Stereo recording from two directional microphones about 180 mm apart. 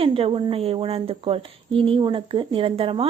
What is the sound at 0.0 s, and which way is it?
Speech, 30° right (ahead or behind).